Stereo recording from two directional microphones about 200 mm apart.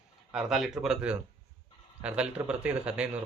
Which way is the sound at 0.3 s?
Centre (ahead or behind).